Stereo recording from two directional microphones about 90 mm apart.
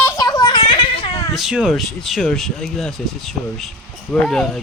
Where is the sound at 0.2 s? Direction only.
45° left (ahead or behind); by 1.2 s 75° left (ahead or behind).